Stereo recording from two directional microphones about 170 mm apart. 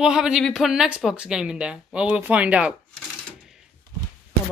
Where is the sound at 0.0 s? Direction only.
5° right (ahead or behind).